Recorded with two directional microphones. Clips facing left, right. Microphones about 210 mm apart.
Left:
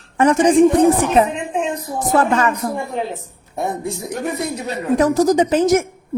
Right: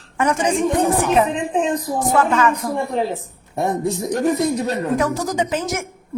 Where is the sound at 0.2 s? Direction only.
35° left (ahead or behind).